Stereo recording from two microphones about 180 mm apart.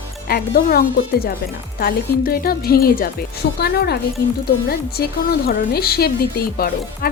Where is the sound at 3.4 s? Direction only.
70° left (ahead or behind).